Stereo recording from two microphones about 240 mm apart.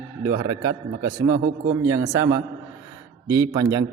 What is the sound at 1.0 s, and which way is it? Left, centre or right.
A man's voice, centre.